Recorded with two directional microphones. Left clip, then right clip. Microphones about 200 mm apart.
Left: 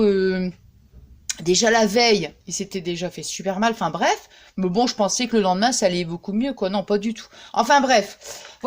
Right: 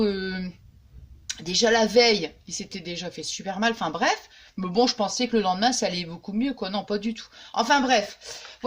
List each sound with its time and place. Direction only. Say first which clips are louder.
0.0 s speech: left 8 dB; 40° left (ahead or behind)